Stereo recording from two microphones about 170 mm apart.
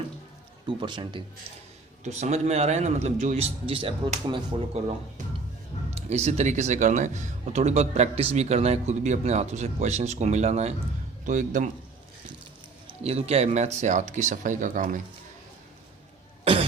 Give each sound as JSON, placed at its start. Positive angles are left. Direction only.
{"t": 0.8, "sound": "speech", "side_deg": -30}
{"t": 2.0, "sound": "speech", "side_deg": -40}
{"t": 12.9, "sound": "speech", "side_deg": -35}
{"t": 16.4, "sound": "cough", "side_deg": -35}